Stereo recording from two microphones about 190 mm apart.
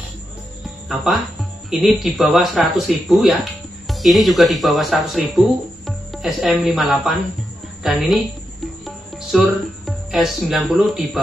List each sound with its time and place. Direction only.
0.8 s speech: centre (ahead or behind)
8.8 s music: centre (ahead or behind)